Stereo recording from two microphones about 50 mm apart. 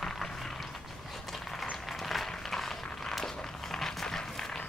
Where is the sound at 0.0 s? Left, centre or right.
Centre.